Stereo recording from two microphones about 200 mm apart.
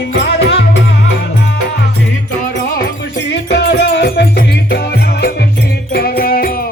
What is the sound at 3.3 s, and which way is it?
Music, 55° left (ahead or behind).